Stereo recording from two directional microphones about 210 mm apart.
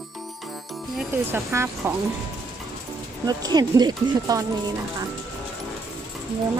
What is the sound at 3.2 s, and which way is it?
Speech, 20° right (ahead or behind).